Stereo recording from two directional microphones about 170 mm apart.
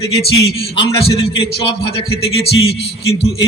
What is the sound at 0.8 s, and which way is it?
A man's voice, 30° left (ahead or behind).